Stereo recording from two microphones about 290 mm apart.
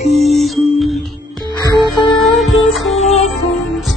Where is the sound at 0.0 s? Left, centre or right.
Left.